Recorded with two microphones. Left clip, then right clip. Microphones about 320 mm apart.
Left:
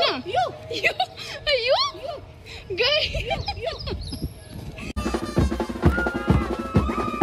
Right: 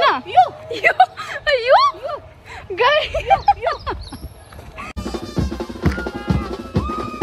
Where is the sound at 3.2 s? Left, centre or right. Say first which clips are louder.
Right 13 dB; centre.